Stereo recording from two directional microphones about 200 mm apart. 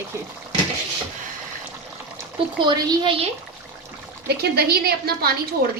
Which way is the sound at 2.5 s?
20° right (ahead or behind).